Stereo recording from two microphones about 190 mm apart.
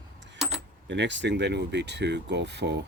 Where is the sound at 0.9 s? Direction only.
70° right (ahead or behind).